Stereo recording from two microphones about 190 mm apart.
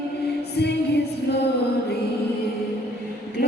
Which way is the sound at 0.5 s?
60° left (ahead or behind).